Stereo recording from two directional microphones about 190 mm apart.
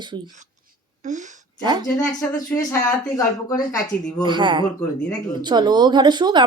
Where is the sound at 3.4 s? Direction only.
20° left (ahead or behind).